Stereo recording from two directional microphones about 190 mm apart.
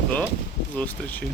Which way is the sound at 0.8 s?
10° left (ahead or behind).